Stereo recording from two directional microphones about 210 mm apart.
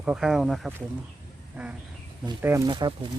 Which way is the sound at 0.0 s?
5° right (ahead or behind).